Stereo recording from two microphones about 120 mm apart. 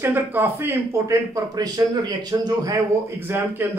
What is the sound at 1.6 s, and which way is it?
A man's voice, 35° right (ahead or behind).